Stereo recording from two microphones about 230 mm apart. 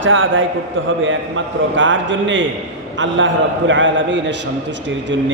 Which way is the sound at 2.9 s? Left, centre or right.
Right.